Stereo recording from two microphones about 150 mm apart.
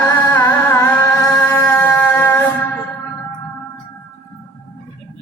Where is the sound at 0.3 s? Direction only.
15° left (ahead or behind).